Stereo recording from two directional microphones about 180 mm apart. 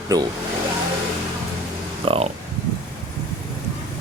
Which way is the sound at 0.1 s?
20° right (ahead or behind).